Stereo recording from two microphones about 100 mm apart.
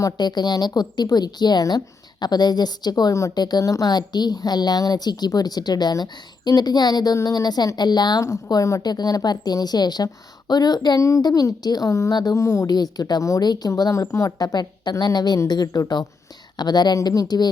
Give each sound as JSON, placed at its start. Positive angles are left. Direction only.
{"t": 0.0, "sound": "a woman's voice", "side_deg": 45}